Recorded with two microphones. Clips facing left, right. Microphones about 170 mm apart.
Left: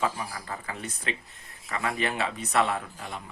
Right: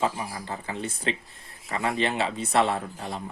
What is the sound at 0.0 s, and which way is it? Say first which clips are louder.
Speech: right 2 dB; 25° right (ahead or behind).